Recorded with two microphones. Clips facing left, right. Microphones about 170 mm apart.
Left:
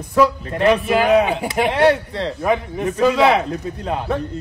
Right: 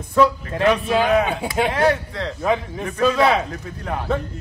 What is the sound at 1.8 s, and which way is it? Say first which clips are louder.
Speech: left 4 dB; 30° left (ahead or behind).